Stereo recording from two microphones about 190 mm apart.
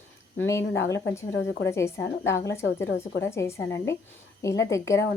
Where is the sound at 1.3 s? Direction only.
75° left (ahead or behind).